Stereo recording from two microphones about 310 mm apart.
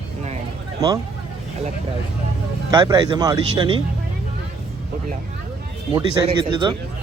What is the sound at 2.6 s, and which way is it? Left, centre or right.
Speech, centre.